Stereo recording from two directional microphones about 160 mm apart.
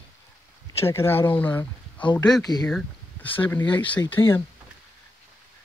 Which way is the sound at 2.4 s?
25° left (ahead or behind).